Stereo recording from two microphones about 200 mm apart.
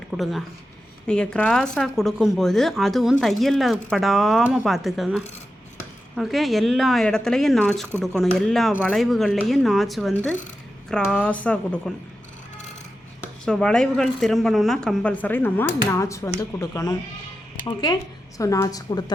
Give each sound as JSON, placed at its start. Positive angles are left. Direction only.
{"t": 0.2, "sound": "speech", "side_deg": 0}
{"t": 13.2, "sound": "speech", "side_deg": 5}